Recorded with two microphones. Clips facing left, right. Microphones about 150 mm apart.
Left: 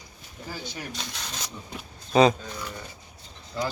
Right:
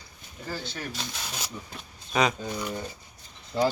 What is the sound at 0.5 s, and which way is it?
Speech, 15° left (ahead or behind).